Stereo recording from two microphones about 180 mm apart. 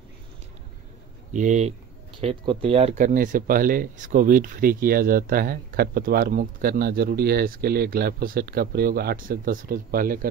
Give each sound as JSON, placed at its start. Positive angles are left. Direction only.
{"t": 1.3, "sound": "speech", "side_deg": -45}